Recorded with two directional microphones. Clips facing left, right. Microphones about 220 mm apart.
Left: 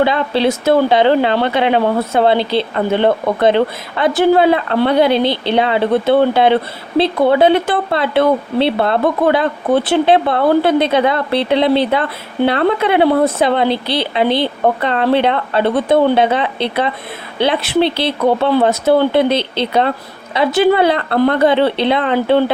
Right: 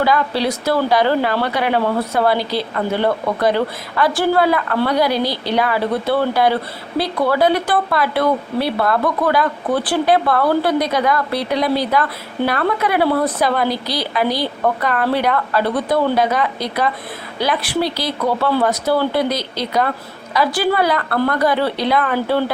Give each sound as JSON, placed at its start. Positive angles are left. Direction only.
{"t": 0.0, "sound": "speech", "side_deg": 25}